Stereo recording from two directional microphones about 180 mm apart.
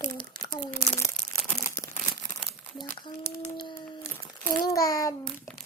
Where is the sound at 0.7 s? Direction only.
15° left (ahead or behind).